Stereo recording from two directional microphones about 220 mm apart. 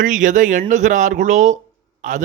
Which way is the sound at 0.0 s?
35° right (ahead or behind).